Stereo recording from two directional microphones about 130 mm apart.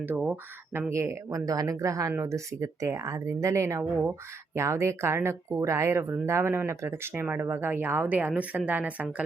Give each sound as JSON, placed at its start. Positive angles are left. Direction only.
{"t": 0.0, "sound": "speech", "side_deg": -15}